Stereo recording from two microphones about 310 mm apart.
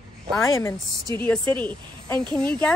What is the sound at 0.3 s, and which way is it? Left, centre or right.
Speech, centre.